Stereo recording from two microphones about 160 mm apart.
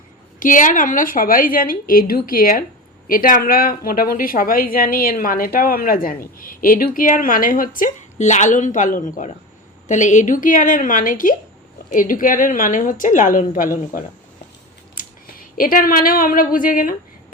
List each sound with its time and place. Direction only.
0.3 s a woman's voice: 55° left (ahead or behind)
15.5 s a woman's voice: 60° left (ahead or behind)